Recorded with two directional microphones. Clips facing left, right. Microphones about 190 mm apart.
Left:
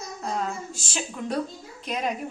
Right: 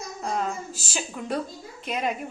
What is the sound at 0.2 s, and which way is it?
Female singing, centre (ahead or behind).